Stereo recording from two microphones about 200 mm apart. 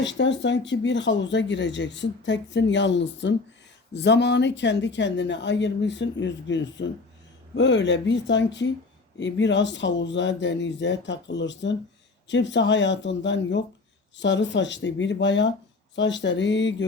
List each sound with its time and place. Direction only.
0.0 s speech: 60° left (ahead or behind)